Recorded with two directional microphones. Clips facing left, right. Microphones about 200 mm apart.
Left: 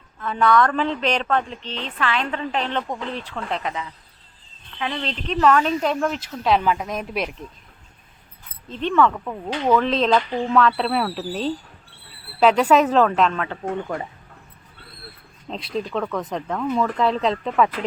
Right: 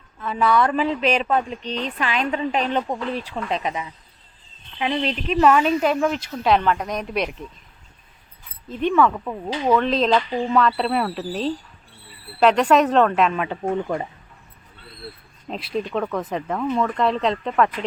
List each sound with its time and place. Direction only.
0.2 s a woman's voice: 5° right (ahead or behind)
8.7 s a woman's voice: 10° right (ahead or behind)
15.4 s speech: 5° right (ahead or behind)